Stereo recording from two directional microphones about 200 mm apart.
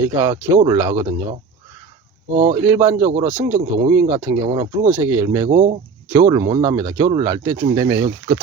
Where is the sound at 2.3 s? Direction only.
30° right (ahead or behind).